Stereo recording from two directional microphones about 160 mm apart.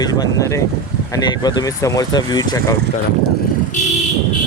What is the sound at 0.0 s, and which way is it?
Speech, 25° left (ahead or behind).